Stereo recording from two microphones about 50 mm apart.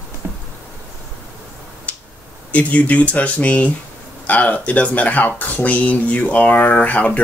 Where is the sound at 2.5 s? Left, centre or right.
Left.